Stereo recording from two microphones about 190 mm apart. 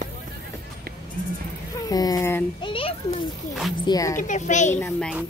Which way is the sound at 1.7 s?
20° left (ahead or behind).